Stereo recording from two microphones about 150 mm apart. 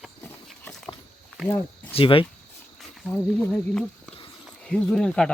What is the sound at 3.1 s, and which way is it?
Speech, 10° left (ahead or behind).